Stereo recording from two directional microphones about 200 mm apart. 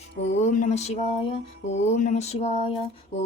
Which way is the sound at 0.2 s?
35° left (ahead or behind).